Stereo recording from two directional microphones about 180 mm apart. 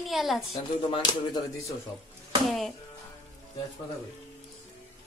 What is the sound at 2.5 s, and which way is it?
Speech, centre (ahead or behind).